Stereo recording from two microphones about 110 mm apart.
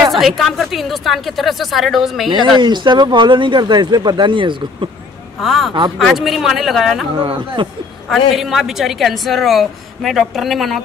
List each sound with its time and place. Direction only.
0.1 s a woman's voice: centre (ahead or behind)
2.3 s speech: 45° right (ahead or behind)
5.4 s a woman's voice: centre (ahead or behind)
7.2 s speech: 50° right (ahead or behind)
8.4 s a woman's voice: centre (ahead or behind)